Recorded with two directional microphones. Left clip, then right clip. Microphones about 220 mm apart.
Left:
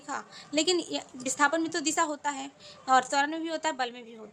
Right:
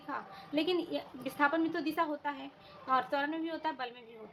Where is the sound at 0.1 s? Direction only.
25° left (ahead or behind).